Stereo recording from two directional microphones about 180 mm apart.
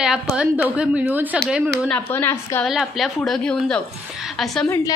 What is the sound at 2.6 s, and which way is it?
A woman's voice, centre (ahead or behind).